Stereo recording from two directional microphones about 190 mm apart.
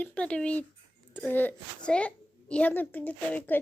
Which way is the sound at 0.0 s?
5° left (ahead or behind).